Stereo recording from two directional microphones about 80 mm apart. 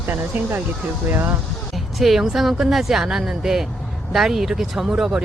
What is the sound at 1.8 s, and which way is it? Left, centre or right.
A woman's voice, centre.